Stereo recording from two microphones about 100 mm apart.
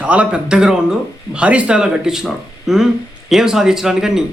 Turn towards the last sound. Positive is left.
turn(degrees=-5)  # may be behind; listen again after turning